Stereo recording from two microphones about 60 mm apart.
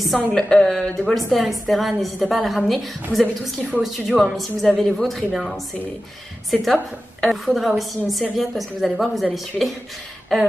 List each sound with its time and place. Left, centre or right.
0.3 s a woman's voice: centre
0.9 s a woman's voice: centre
4.6 s a woman's voice: centre
6.7 s a woman's voice: centre